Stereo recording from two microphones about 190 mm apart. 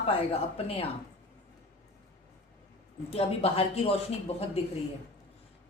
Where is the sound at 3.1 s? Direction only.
30° left (ahead or behind).